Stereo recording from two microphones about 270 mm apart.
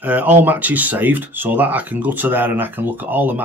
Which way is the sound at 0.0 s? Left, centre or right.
Centre.